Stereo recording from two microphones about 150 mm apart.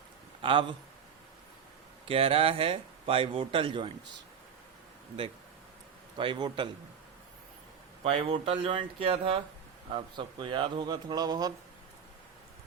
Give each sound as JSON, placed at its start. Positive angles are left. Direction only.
{"t": 0.4, "sound": "speech", "side_deg": -35}
{"t": 2.0, "sound": "speech", "side_deg": -40}
{"t": 6.1, "sound": "speech", "side_deg": -30}
{"t": 8.0, "sound": "speech", "side_deg": -40}